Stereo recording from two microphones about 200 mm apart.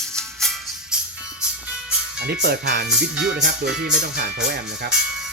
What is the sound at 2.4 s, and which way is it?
Speech, 55° right (ahead or behind).